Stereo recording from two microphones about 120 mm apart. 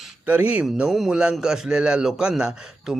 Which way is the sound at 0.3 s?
10° right (ahead or behind).